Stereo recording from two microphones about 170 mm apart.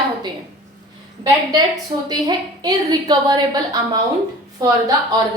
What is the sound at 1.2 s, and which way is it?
A woman's voice, 25° right (ahead or behind).